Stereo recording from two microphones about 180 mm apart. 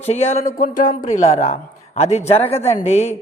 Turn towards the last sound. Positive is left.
turn(degrees=35)  # may be behind; listen again after turning